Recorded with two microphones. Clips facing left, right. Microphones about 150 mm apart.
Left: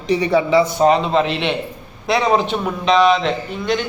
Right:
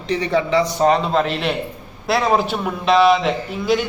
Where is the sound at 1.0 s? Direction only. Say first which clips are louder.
Left 2 dB; centre (ahead or behind).